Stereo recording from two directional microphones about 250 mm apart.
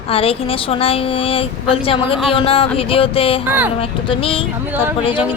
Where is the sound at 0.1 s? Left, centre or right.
Left.